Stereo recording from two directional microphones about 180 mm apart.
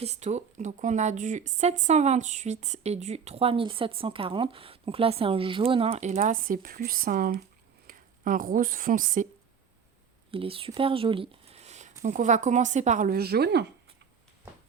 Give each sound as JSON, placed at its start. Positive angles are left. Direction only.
{"t": 0.0, "sound": "a woman's voice", "side_deg": -40}
{"t": 10.3, "sound": "speech", "side_deg": -30}
{"t": 13.1, "sound": "speech", "side_deg": -60}